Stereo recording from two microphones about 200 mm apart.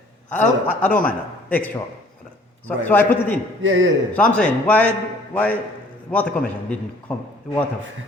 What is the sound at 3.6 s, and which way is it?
Speech, 75° right (ahead or behind).